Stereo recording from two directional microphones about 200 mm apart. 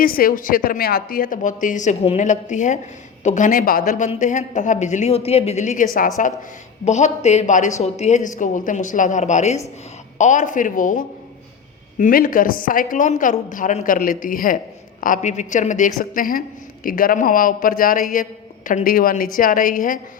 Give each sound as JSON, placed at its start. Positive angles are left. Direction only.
{"t": 0.0, "sound": "a woman's voice", "side_deg": 45}